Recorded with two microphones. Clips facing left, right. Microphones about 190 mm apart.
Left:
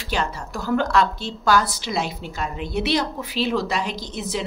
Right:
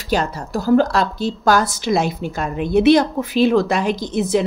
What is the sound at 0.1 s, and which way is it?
A woman's voice, 40° right (ahead or behind).